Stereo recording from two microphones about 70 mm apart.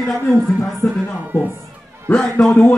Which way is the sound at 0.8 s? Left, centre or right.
Left.